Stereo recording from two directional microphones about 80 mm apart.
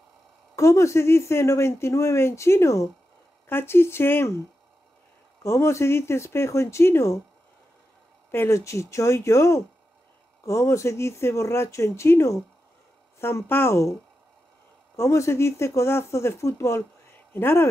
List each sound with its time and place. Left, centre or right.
0.6 s speech: left
3.4 s speech: left
5.4 s speech: left
8.3 s speech: left
15.0 s speech: left